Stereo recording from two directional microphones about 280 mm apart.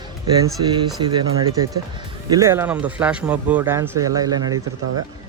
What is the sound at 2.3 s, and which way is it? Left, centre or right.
Speech, centre.